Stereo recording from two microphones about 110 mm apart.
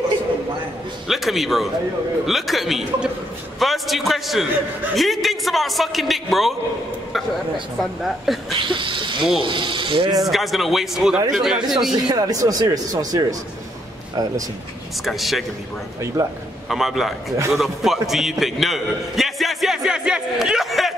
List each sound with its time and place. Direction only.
1.0 s speech: centre (ahead or behind)
8.0 s speech: centre (ahead or behind)
8.6 s speech: 50° right (ahead or behind)
10.2 s speech: centre (ahead or behind)
11.9 s speech: 35° right (ahead or behind)
15.0 s speech: centre (ahead or behind)
16.2 s a man's voice: 30° right (ahead or behind)
16.6 s a man's voice: centre (ahead or behind)